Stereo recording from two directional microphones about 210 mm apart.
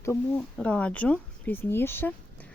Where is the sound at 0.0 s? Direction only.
10° left (ahead or behind).